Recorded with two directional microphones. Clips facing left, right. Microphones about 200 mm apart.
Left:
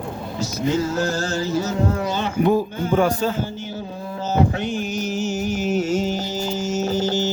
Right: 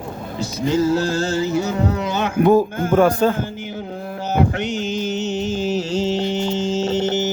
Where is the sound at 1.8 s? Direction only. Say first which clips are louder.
Right 1 dB; 70° right (ahead or behind).